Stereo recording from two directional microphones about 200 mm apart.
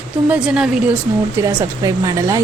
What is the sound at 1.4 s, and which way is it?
Speech, 20° right (ahead or behind).